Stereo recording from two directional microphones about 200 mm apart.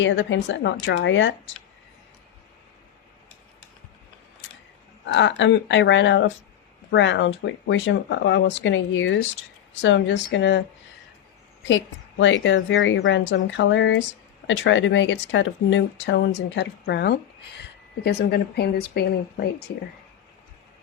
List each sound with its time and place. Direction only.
0.0 s a woman's voice: 65° left (ahead or behind)
5.0 s a woman's voice: 65° left (ahead or behind)
11.7 s a woman's voice: 70° left (ahead or behind); by 19.0 s 55° left (ahead or behind)